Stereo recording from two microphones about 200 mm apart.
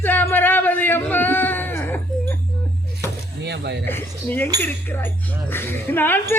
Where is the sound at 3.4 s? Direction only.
60° right (ahead or behind).